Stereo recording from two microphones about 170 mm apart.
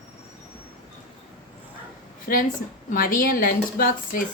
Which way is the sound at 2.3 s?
55° left (ahead or behind).